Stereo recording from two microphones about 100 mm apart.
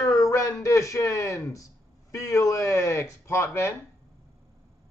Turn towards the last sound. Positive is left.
turn(degrees=25)  # may be behind; listen again after turning